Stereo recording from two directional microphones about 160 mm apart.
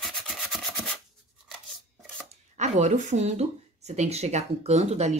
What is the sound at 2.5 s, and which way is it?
Speech, 45° right (ahead or behind).